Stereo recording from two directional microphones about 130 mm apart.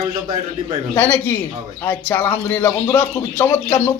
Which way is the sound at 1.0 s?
15° left (ahead or behind).